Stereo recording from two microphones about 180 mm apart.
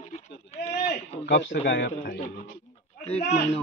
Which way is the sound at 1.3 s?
80° left.